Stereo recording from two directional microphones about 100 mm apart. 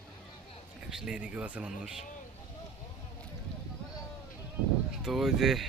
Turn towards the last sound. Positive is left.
turn(degrees=-5)  # may be behind; listen again after turning